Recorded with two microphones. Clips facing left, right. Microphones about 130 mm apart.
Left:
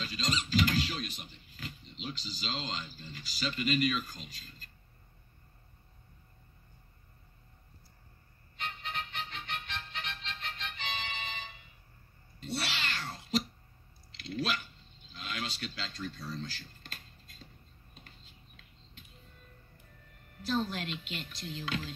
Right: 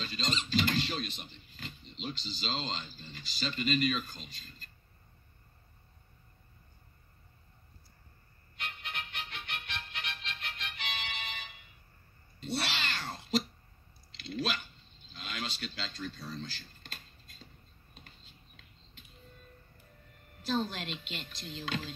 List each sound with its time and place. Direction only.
0.0 s a sound: 25° right (ahead or behind)
2.0 s speech: 25° right (ahead or behind)
8.6 s music: 35° left (ahead or behind)
12.4 s cat: 20° right (ahead or behind)
14.1 s a sound: 25° right (ahead or behind)
15.2 s speech: 25° right (ahead or behind)
20.4 s speech: 25° right (ahead or behind)